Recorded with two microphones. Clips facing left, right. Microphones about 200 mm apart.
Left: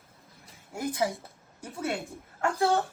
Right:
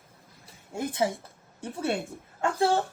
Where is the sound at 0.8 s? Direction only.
25° right (ahead or behind).